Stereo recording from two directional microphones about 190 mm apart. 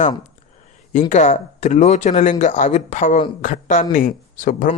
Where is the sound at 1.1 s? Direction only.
40° left (ahead or behind).